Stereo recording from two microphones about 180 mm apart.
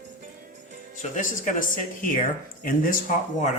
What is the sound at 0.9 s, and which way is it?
Speech, 45° left (ahead or behind).